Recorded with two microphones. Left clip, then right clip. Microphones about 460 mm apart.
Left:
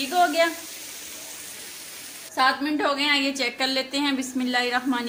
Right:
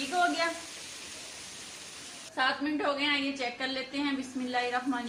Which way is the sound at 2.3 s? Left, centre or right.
Centre.